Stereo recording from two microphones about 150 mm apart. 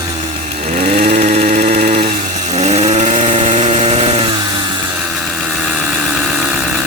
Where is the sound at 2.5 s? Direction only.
45° right (ahead or behind).